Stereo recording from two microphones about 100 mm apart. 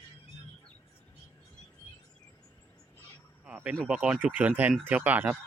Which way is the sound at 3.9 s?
10° right (ahead or behind).